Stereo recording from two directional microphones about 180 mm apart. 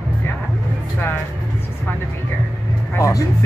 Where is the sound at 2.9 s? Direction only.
15° left (ahead or behind).